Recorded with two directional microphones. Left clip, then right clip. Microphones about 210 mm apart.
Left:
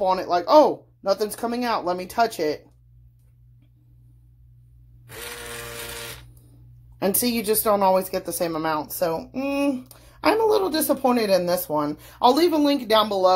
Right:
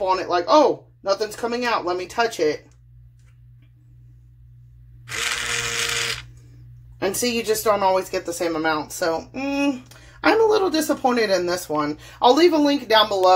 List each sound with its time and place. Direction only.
0.0 s speech: 20° left (ahead or behind)
5.0 s a sound: centre (ahead or behind)
7.3 s speech: 20° left (ahead or behind)